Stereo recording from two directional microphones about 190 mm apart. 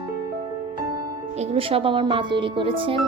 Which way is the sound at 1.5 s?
30° right (ahead or behind).